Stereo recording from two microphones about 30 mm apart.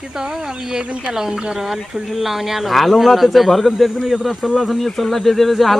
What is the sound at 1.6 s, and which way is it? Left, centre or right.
Speech, centre.